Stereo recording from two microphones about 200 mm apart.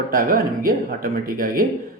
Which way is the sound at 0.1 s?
45° right (ahead or behind).